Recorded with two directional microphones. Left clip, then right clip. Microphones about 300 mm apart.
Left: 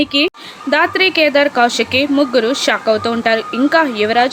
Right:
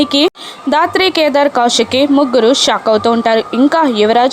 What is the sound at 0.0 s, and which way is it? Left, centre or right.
A woman's voice, centre.